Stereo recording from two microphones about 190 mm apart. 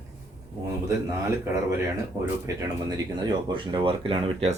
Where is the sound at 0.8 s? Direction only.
15° right (ahead or behind).